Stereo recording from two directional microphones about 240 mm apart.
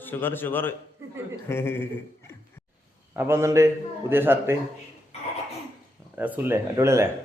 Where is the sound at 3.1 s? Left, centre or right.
Centre.